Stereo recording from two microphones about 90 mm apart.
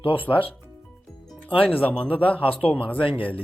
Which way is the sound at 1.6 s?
15° left (ahead or behind).